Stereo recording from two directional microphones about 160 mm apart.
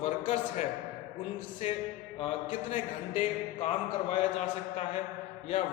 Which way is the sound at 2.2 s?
35° left (ahead or behind).